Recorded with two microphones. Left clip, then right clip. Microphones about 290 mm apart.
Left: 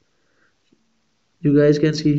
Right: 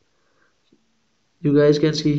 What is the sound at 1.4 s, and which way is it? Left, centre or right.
Speech, centre.